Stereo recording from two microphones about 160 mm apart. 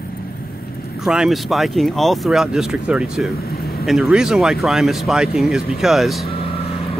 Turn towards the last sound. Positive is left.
turn(degrees=35)  # may be behind; listen again after turning